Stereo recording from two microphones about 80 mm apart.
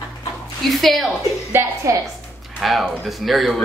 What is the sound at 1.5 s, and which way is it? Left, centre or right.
Speech, right.